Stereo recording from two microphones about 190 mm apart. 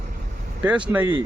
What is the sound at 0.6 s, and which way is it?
Speech, 5° right (ahead or behind).